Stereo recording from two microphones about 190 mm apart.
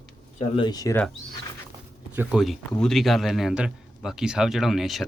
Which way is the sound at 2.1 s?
5° right (ahead or behind).